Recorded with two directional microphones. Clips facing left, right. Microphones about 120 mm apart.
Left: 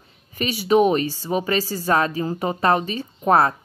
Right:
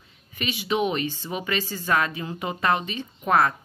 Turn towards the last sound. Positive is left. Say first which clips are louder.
# left 4 dB
turn(degrees=35)  # may be behind; listen again after turning